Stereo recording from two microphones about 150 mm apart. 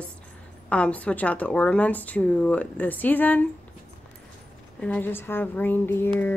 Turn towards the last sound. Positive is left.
turn(degrees=15)  # may be behind; listen again after turning